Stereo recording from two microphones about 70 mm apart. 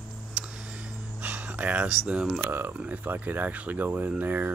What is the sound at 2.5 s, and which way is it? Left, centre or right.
Speech, right.